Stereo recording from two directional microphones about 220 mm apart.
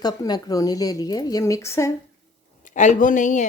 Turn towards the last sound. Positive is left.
turn(degrees=35)  # may be behind; listen again after turning